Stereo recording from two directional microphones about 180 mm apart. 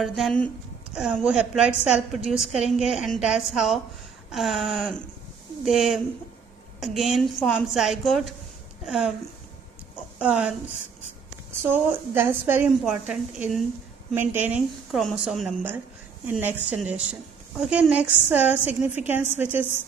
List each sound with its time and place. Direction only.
0.0 s a woman's voice: centre (ahead or behind)
10.1 s a woman's voice: 5° right (ahead or behind)
11.6 s a woman's voice: 10° right (ahead or behind)